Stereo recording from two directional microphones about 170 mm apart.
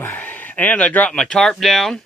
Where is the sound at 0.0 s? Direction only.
10° left (ahead or behind).